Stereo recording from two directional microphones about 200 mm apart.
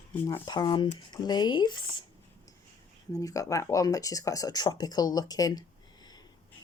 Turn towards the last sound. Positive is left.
turn(degrees=20)  # may be behind; listen again after turning